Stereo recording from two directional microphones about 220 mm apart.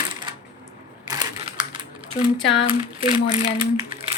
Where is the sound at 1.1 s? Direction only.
20° right (ahead or behind).